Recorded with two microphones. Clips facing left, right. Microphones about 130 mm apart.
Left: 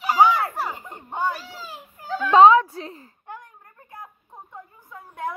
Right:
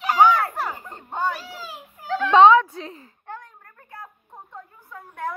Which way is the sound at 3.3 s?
15° left (ahead or behind).